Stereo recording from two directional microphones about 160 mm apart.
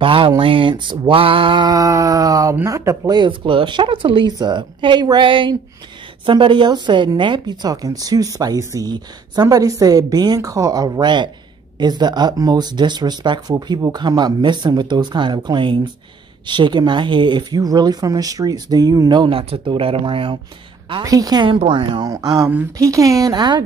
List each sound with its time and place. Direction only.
0.0 s speech: 30° right (ahead or behind)
20.9 s speech: 20° right (ahead or behind)